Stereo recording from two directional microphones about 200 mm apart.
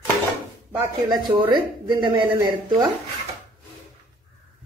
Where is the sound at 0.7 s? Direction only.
10° right (ahead or behind).